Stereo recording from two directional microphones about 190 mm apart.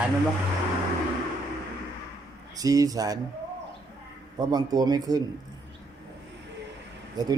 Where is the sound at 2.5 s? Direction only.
20° right (ahead or behind).